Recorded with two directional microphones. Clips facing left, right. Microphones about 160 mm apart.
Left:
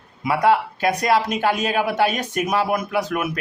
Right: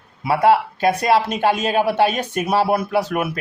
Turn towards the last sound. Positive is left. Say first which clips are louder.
# right 3 dB
turn(degrees=-30)  # may be behind; listen again after turning